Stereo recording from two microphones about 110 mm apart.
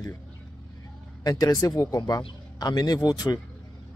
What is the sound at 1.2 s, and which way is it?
Speech, 35° left (ahead or behind).